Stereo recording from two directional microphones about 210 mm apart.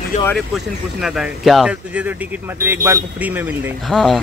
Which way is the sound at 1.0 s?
Centre (ahead or behind).